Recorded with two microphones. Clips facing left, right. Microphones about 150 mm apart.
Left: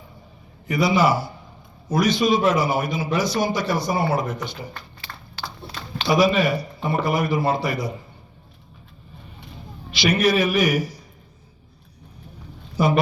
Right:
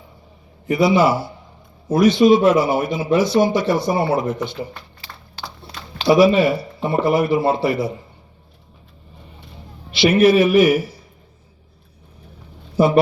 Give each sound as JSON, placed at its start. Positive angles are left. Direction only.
{"t": 0.7, "sound": "a man's voice", "side_deg": -25}
{"t": 9.9, "sound": "a man's voice", "side_deg": -25}